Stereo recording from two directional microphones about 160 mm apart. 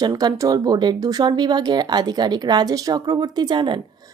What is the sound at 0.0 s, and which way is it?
Speech, 25° right (ahead or behind).